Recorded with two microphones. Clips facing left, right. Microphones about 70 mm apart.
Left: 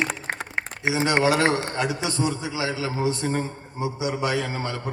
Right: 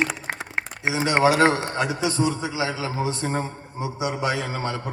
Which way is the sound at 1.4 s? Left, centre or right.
Right.